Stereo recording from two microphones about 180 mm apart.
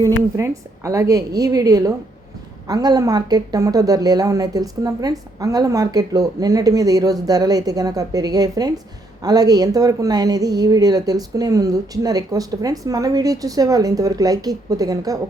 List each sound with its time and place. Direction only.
0.0 s a woman's voice: 15° right (ahead or behind)